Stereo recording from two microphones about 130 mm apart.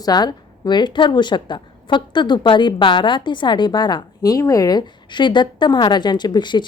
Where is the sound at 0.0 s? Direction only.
30° left (ahead or behind).